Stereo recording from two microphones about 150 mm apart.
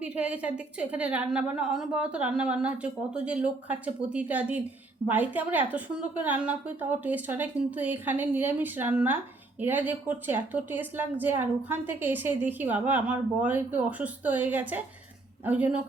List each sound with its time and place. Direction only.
0.0 s a woman's voice: 5° right (ahead or behind)